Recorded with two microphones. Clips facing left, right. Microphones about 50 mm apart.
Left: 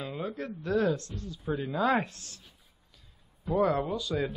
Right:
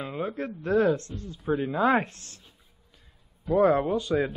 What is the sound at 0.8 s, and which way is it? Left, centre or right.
Speech, right.